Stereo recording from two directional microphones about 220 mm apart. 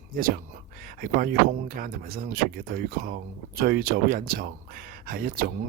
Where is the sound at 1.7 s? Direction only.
40° right (ahead or behind).